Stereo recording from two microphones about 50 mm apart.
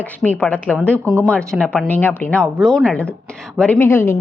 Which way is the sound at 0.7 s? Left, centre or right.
Right.